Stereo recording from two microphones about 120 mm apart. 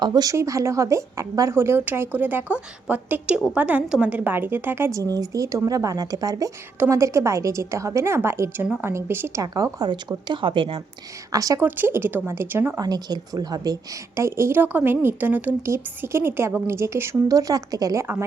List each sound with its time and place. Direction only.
0.0 s speech: 35° right (ahead or behind)
11.3 s speech: 30° right (ahead or behind)
11.6 s speech: 15° right (ahead or behind)
12.8 s a woman's voice: 35° right (ahead or behind)
14.2 s speech: 20° right (ahead or behind)